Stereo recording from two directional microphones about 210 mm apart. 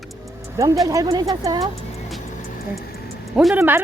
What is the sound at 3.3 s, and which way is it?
Speech, centre (ahead or behind).